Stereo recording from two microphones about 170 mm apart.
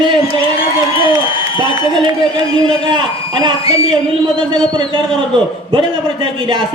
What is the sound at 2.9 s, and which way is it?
Speech, 25° right (ahead or behind).